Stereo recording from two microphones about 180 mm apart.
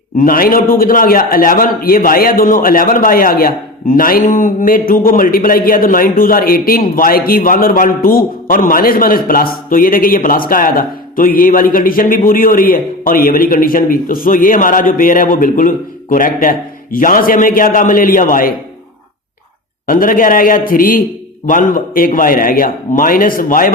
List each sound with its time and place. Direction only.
0.2 s a man's voice: 50° left (ahead or behind)
19.9 s a man's voice: 50° left (ahead or behind)